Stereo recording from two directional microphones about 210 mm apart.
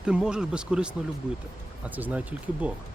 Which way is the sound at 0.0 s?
5° right (ahead or behind).